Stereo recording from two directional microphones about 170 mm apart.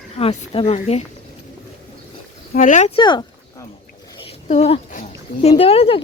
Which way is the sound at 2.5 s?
45° left (ahead or behind).